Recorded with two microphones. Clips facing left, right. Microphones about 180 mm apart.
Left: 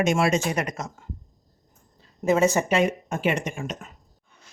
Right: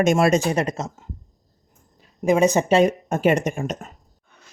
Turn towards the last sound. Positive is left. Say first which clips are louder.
# right 6 dB
turn(degrees=-40)  # may be behind; listen again after turning